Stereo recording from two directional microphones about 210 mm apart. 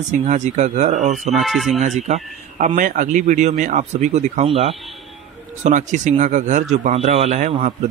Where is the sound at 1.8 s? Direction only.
30° right (ahead or behind).